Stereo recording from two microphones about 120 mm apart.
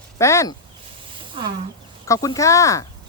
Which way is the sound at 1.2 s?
45° right (ahead or behind).